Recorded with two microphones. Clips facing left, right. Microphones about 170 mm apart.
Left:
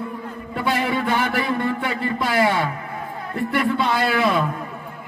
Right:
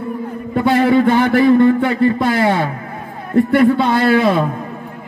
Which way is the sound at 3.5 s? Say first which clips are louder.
Right 8 dB; 50° right (ahead or behind).